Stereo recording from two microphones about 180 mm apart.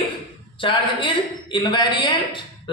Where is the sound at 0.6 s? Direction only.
30° left (ahead or behind).